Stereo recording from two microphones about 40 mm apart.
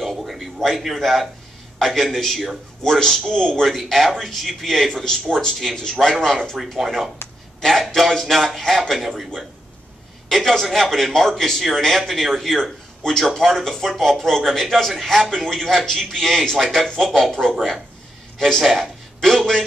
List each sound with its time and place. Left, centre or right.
0.0 s a sound: centre
1.9 s a man's voice: centre
3.6 s a man's voice: centre
6.6 s a man's voice: centre
10.2 s a man's voice: centre